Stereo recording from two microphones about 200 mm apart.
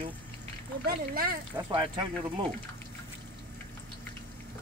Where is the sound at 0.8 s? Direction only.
45° right (ahead or behind).